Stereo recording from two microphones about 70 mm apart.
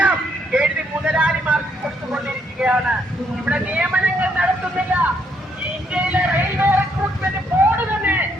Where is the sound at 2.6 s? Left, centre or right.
Centre.